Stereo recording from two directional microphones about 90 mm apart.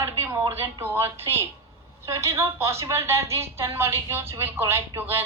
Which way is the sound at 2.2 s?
30° right (ahead or behind).